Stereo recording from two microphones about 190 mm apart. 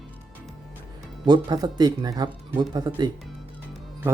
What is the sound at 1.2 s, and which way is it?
Speech, 20° right (ahead or behind).